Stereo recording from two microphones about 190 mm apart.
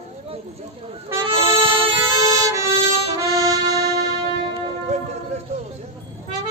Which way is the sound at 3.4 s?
20° right (ahead or behind).